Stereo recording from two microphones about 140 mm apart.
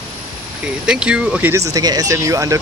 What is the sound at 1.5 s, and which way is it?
Speech, 25° right (ahead or behind).